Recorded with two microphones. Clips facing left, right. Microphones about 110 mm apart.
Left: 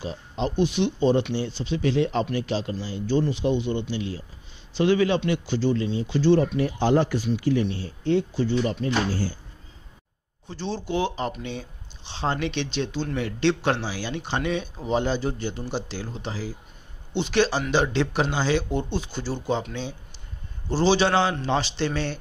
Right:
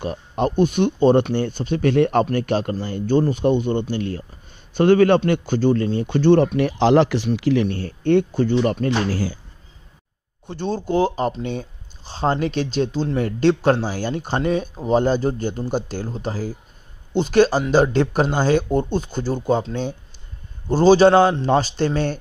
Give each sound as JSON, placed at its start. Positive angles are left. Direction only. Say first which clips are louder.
{"t": 0.0, "sound": "a man's voice", "louder": "right 6 dB", "side_deg": -55}
{"t": 10.4, "sound": "speech", "louder": "right 6 dB", "side_deg": -55}